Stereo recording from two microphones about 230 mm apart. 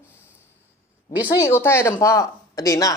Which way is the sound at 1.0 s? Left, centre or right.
Centre.